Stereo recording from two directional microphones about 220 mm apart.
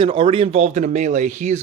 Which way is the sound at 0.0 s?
25° right (ahead or behind).